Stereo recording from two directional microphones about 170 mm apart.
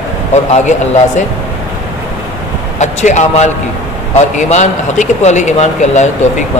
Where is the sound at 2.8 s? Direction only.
45° left (ahead or behind).